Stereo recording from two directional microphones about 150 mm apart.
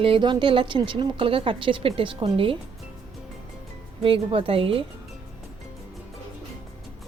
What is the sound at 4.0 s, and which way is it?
Speech, 35° right (ahead or behind).